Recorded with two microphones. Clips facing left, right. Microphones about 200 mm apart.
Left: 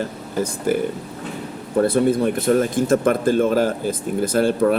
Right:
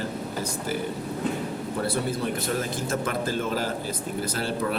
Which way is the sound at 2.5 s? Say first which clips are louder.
Left 10 dB; 55° left (ahead or behind).